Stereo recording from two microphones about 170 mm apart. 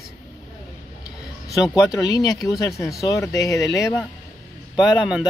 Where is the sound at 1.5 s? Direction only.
20° left (ahead or behind).